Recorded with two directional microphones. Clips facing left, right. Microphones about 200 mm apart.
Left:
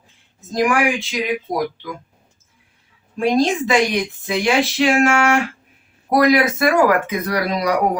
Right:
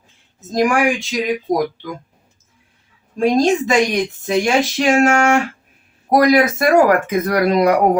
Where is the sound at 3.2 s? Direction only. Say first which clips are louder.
Right 2 dB; 40° right (ahead or behind).